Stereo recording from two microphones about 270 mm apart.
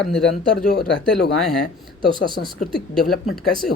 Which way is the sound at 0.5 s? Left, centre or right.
Left.